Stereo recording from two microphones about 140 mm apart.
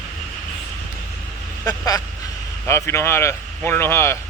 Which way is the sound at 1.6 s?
25° left (ahead or behind).